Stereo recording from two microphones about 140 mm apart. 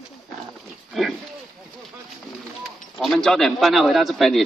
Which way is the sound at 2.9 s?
Centre (ahead or behind).